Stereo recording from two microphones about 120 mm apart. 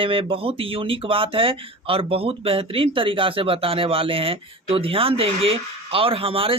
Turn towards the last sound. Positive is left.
turn(degrees=-50)  # may be behind; listen again after turning